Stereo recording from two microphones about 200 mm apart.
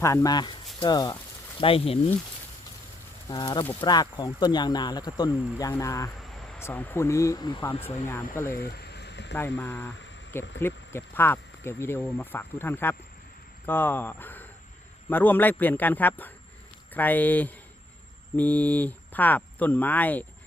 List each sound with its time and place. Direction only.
0.0 s speech: 15° left (ahead or behind)
3.2 s speech: 20° left (ahead or behind)
8.9 s a sound: 55° left (ahead or behind)
9.6 s speech: 10° left (ahead or behind)